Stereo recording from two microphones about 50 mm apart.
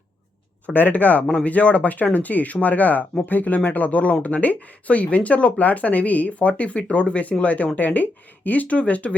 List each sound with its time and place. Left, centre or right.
0.7 s speech: left